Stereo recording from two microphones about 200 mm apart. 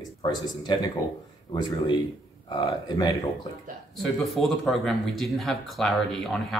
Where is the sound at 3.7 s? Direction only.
45° right (ahead or behind).